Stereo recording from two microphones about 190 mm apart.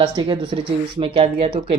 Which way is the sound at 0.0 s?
25° right (ahead or behind).